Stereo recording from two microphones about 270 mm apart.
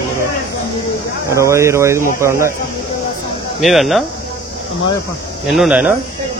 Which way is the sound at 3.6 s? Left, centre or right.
Centre.